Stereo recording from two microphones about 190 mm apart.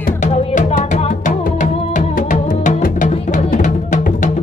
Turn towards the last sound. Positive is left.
turn(degrees=40)  # may be behind; listen again after turning